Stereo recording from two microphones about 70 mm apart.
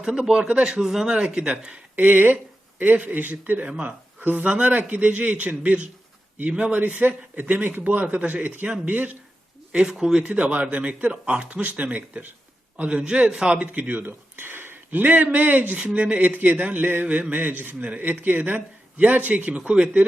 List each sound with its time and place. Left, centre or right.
0.0 s speech: centre
2.0 s speech: right
9.9 s speech: centre
10.2 s speech: centre